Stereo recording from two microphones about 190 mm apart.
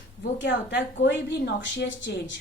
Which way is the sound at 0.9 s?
70° left (ahead or behind).